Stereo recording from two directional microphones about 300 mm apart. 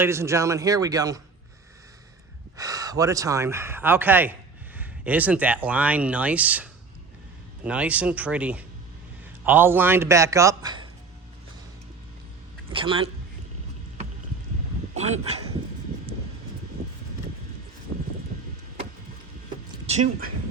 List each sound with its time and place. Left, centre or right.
0.0 s speech: centre
2.6 s speech: centre
12.7 s speech: centre
14.9 s speech: right
17.9 s vehicle: right
19.9 s speech: right